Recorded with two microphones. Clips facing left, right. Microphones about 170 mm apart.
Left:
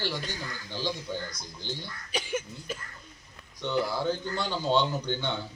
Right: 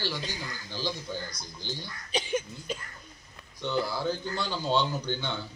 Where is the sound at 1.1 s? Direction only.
25° left (ahead or behind).